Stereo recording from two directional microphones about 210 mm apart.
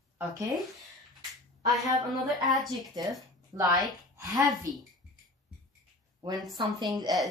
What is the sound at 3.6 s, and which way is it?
Speech, 20° right (ahead or behind).